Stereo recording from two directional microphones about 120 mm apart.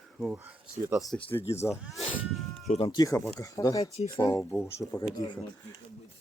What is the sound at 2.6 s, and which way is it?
Speech, 60° left (ahead or behind).